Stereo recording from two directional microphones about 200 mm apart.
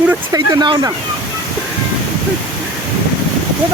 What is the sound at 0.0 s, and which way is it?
Speech, 10° right (ahead or behind).